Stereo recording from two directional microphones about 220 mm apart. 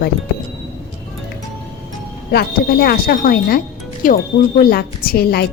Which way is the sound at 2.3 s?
45° left (ahead or behind).